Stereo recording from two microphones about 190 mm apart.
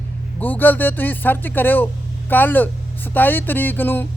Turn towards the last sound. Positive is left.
turn(degrees=10)  # may be behind; listen again after turning